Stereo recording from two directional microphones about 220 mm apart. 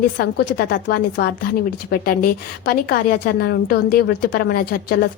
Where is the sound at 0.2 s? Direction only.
45° left (ahead or behind).